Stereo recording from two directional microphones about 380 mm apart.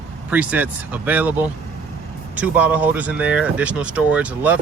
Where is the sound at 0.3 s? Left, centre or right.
Centre.